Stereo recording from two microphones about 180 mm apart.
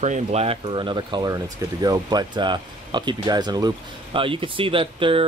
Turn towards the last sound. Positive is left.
turn(degrees=-30)  # may be behind; listen again after turning